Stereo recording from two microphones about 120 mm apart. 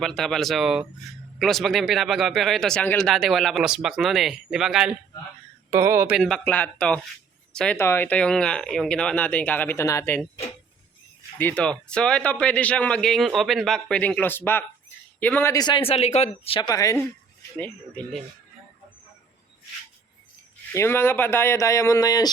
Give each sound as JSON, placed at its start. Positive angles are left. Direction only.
{"t": 0.0, "sound": "speech", "side_deg": 5}
{"t": 3.1, "sound": "speech", "side_deg": 0}
{"t": 5.7, "sound": "speech", "side_deg": -25}
{"t": 6.1, "sound": "speech", "side_deg": 5}
{"t": 7.8, "sound": "speech", "side_deg": 20}
{"t": 11.3, "sound": "speech", "side_deg": 15}
{"t": 15.5, "sound": "speech", "side_deg": 35}
{"t": 15.8, "sound": "speech", "side_deg": 60}
{"t": 16.6, "sound": "speech", "side_deg": 30}
{"t": 17.6, "sound": "speech", "side_deg": 10}
{"t": 20.7, "sound": "speech", "side_deg": 20}